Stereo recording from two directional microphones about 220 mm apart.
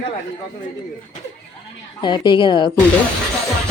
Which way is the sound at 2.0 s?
20° left (ahead or behind).